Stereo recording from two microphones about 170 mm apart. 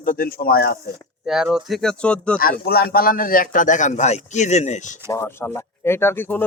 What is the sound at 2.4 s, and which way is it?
A man's voice, 60° left (ahead or behind).